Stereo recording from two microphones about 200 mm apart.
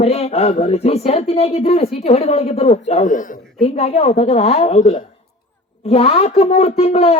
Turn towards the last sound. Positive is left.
turn(degrees=30)  # may be behind; listen again after turning